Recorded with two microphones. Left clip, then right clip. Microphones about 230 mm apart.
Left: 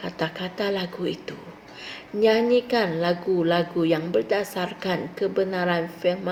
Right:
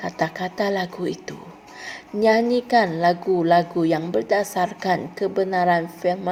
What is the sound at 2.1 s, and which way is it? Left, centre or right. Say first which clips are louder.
A woman's voice: right 1 dB; right.